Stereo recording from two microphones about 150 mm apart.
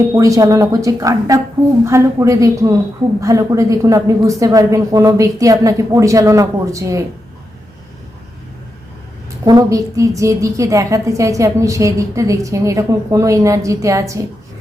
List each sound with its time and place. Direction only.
0.1 s a woman's voice: 20° right (ahead or behind)
9.4 s a woman's voice: 25° right (ahead or behind)